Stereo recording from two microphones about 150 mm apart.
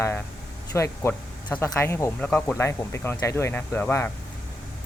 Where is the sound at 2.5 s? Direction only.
15° left (ahead or behind).